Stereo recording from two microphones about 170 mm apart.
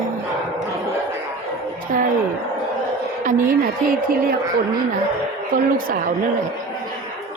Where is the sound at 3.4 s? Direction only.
55° right (ahead or behind).